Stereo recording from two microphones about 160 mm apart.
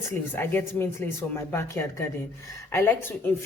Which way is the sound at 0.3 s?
15° left (ahead or behind).